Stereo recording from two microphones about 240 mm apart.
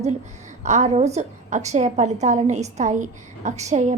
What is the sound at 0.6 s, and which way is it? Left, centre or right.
A woman's voice, right.